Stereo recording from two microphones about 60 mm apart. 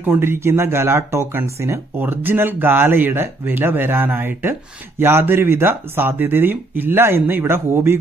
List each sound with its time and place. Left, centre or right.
0.0 s speech: right
2.0 s speech: right